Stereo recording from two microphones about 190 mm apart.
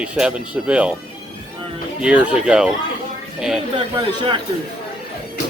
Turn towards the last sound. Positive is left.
turn(degrees=-25)  # may be behind; listen again after turning